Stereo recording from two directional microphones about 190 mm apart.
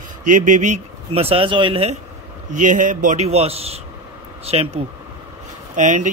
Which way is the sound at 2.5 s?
40° right (ahead or behind).